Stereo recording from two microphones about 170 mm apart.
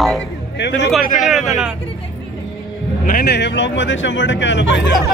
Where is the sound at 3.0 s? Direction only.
60° left (ahead or behind); by 4.7 s 90° left.